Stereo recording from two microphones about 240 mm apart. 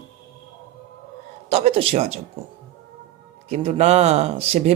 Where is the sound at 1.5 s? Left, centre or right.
Right.